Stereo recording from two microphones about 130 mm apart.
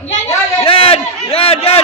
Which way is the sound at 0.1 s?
50° left (ahead or behind).